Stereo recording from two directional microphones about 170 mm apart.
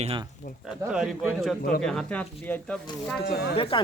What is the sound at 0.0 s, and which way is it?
Speech, 35° right (ahead or behind).